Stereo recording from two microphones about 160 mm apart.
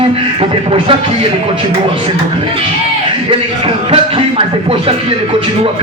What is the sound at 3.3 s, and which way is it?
Beatboxing, 35° right (ahead or behind).